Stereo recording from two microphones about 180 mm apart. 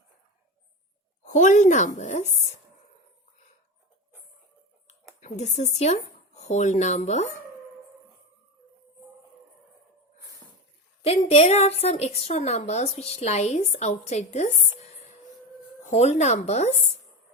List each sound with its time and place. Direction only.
1.2 s a woman's voice: 40° left (ahead or behind)
4.9 s speech: 40° left (ahead or behind)
11.0 s a woman's voice: 35° left (ahead or behind)
15.9 s a woman's voice: 35° left (ahead or behind)